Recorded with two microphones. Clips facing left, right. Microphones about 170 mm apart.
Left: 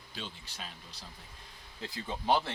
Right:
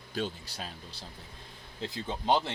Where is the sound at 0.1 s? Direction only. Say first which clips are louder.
Right 10 dB; 40° right (ahead or behind).